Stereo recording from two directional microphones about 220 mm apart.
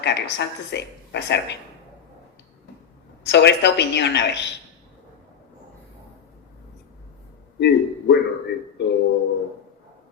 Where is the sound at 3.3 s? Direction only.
50° left (ahead or behind).